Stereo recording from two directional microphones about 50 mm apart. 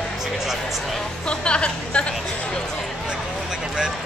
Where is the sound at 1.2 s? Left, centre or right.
Left.